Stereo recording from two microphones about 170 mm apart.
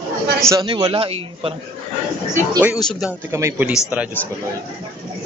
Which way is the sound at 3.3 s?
15° right (ahead or behind).